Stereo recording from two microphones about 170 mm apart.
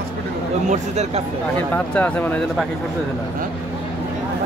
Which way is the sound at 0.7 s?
40° right (ahead or behind).